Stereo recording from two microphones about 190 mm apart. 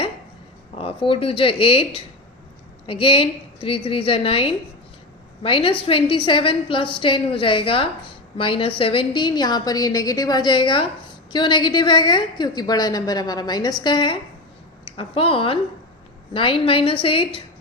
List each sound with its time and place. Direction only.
0.8 s a woman's voice: 30° left (ahead or behind)